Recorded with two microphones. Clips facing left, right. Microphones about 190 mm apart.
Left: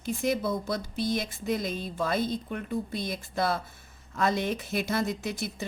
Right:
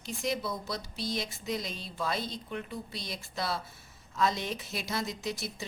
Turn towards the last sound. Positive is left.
turn(degrees=55)  # may be behind; listen again after turning